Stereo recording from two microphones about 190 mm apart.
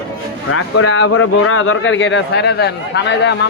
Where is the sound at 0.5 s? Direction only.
90° left.